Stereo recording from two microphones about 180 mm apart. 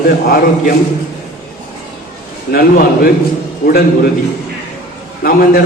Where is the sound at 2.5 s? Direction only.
55° left (ahead or behind).